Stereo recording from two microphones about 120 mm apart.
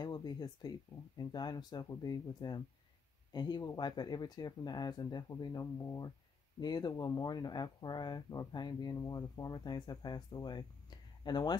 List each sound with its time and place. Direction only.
0.0 s speech: 35° left (ahead or behind)